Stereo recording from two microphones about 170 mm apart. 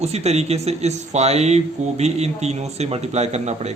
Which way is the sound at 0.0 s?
40° right (ahead or behind).